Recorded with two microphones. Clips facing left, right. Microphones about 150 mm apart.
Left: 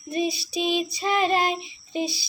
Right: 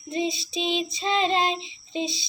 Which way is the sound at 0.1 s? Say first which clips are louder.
Left 1 dB; 20° right (ahead or behind).